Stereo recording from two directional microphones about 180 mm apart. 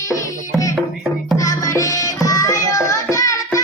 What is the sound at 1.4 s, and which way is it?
Music, 15° left (ahead or behind).